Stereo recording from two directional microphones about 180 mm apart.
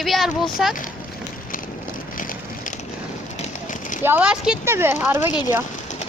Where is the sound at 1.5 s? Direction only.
50° left (ahead or behind).